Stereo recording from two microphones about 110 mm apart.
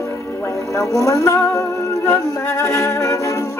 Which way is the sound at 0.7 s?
30° left (ahead or behind).